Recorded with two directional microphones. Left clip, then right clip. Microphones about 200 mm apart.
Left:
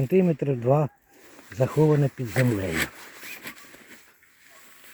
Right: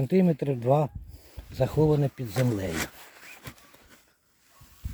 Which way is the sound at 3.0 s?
60° left (ahead or behind).